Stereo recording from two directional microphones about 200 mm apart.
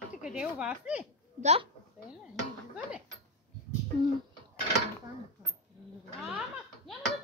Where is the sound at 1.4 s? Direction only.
30° right (ahead or behind).